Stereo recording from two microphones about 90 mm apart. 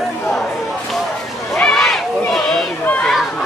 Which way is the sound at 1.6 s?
5° left (ahead or behind).